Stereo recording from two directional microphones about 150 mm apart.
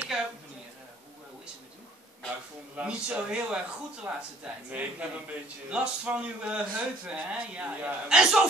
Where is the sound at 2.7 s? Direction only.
5° right (ahead or behind).